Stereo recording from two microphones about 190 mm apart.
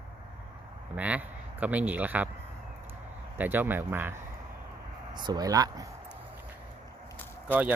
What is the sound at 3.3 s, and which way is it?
Speech, 10° right (ahead or behind).